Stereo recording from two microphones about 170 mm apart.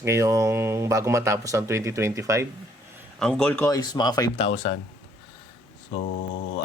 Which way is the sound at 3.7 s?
25° left (ahead or behind).